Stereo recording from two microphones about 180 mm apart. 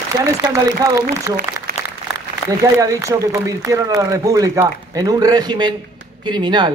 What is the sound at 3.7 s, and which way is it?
A man's voice, 20° right (ahead or behind).